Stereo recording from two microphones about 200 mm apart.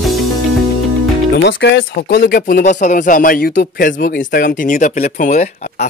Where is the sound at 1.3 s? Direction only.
60° left (ahead or behind); by 5.9 s 35° left (ahead or behind).